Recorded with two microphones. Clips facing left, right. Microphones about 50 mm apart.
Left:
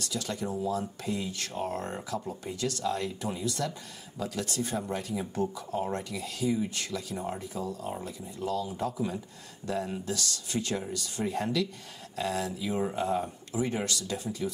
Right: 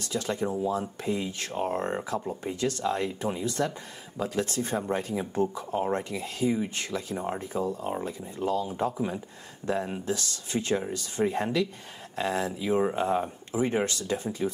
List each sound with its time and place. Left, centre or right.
0.0 s speech: right